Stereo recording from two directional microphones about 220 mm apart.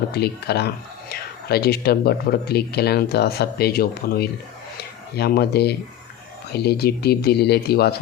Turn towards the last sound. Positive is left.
turn(degrees=45)  # may be behind; listen again after turning